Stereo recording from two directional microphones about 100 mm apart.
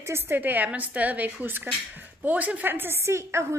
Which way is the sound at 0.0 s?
25° right (ahead or behind).